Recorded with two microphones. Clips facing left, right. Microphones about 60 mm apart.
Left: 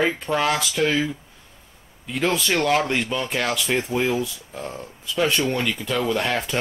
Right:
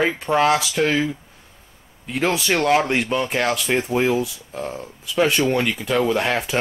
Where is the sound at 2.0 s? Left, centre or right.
Centre.